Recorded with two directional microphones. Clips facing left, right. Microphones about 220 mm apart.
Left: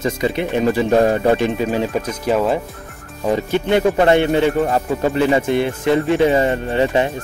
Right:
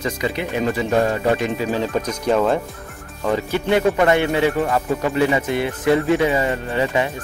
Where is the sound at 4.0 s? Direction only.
30° left (ahead or behind).